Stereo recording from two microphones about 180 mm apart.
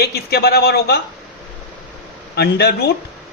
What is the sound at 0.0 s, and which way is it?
Speech, 60° left (ahead or behind).